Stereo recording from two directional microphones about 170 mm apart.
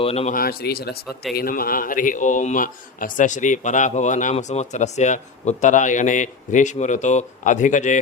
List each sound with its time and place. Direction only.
0.0 s speech: 35° left (ahead or behind)
0.3 s speech: 65° left (ahead or behind); by 7.9 s 45° left (ahead or behind)